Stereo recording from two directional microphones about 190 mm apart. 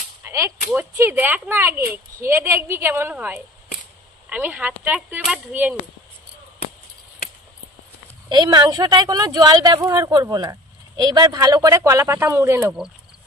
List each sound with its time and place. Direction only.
0.2 s whip: 15° right (ahead or behind)
0.7 s speech: 10° right (ahead or behind)
8.3 s a woman's voice: 20° right (ahead or behind)